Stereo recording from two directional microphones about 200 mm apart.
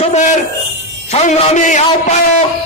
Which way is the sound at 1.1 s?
35° left (ahead or behind).